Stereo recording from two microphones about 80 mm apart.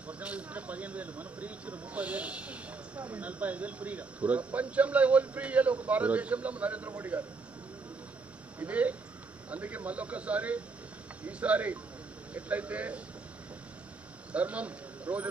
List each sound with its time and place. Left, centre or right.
0.1 s speech: centre
8.5 s speech: centre
14.3 s speech: centre